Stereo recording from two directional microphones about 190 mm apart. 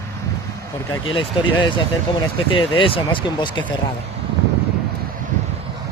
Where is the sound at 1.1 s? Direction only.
25° left (ahead or behind).